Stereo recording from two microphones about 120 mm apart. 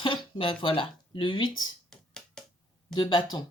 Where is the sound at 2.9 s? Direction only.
35° left (ahead or behind).